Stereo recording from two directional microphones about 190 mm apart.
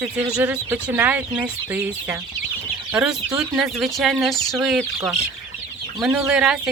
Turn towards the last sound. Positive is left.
turn(degrees=-5)  # may be behind; listen again after turning